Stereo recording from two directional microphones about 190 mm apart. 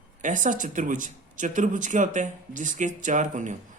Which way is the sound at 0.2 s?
40° right (ahead or behind).